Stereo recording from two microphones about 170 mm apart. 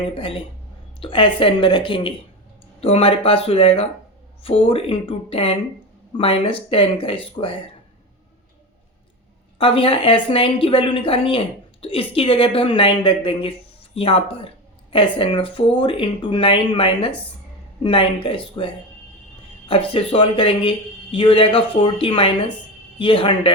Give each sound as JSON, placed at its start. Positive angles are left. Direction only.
{"t": 0.0, "sound": "a woman's voice", "side_deg": 30}
{"t": 9.6, "sound": "a woman's voice", "side_deg": 30}